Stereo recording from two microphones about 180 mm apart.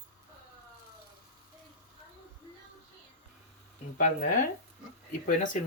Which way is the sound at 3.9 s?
45° left (ahead or behind).